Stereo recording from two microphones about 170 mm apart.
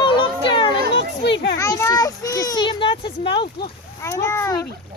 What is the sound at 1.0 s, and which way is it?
Speech, 90° left.